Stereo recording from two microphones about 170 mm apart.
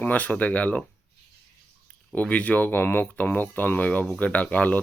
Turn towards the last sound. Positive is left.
turn(degrees=10)  # may be behind; listen again after turning